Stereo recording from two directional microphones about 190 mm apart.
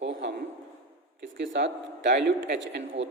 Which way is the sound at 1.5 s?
70° right (ahead or behind).